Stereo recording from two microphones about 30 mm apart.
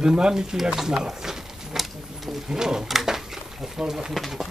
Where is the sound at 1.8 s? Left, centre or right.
Centre.